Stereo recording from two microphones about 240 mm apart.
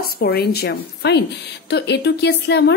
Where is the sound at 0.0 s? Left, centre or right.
Left.